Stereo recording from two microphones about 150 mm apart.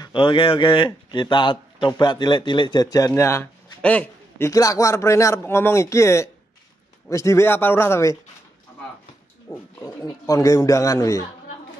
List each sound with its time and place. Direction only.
0.0 s a man's voice: 35° left (ahead or behind)
3.2 s a sound: 20° left (ahead or behind)
4.5 s a man's voice: 20° left (ahead or behind)
9.5 s speech: 20° left (ahead or behind)